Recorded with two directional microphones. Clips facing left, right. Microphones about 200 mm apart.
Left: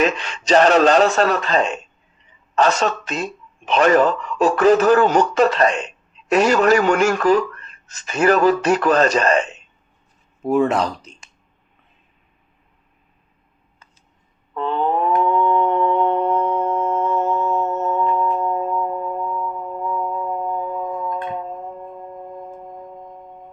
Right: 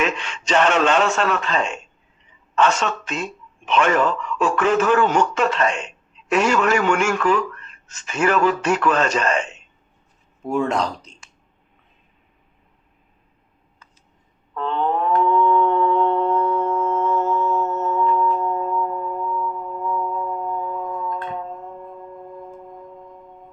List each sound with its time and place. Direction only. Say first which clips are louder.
0.0 s a man's voice: left 4 dB; 35° left (ahead or behind)
10.4 s speech: left 4 dB; 5° left (ahead or behind)
14.5 s a sound: left 2 dB; 5° left (ahead or behind)
20.1 s singing bowl: left 2 dB; 15° left (ahead or behind)